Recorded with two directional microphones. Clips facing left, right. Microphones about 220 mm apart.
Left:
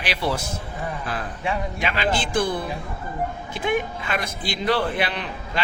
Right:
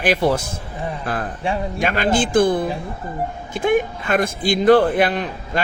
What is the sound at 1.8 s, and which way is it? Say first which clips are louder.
A man's voice: right 7 dB; 50° right (ahead or behind).